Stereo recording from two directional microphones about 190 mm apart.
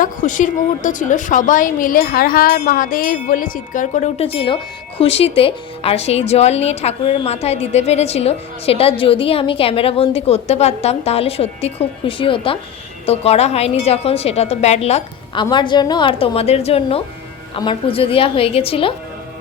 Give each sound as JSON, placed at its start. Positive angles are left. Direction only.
{"t": 0.0, "sound": "a woman's voice", "side_deg": 40}